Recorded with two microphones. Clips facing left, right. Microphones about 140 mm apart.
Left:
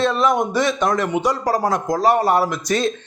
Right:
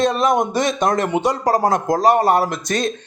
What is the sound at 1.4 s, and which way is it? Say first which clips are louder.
Speech: right 3 dB; 50° right (ahead or behind).